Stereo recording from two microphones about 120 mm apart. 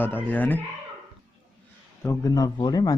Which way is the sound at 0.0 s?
15° left (ahead or behind).